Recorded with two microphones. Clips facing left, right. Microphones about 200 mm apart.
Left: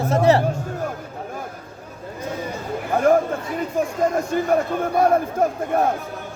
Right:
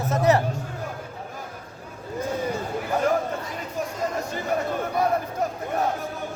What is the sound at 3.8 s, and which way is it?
Speech, 50° left (ahead or behind).